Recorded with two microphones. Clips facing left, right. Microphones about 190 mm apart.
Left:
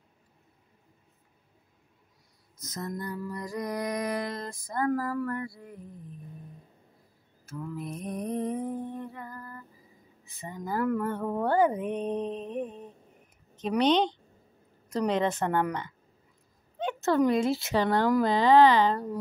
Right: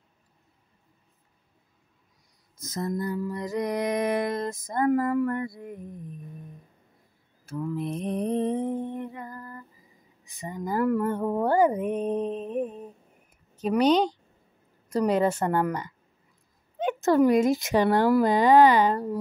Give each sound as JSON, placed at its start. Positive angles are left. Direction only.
{"t": 2.7, "sound": "mantra", "side_deg": -25}
{"t": 7.4, "sound": "mantra", "side_deg": -30}
{"t": 8.0, "sound": "music", "side_deg": -65}
{"t": 8.3, "sound": "lullaby", "side_deg": -30}
{"t": 10.2, "sound": "a woman's voice", "side_deg": -15}